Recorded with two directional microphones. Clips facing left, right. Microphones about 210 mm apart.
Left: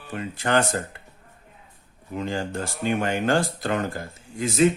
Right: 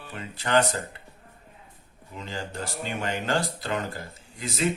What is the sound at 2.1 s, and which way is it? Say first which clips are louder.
Speech: left 8 dB; 50° left (ahead or behind).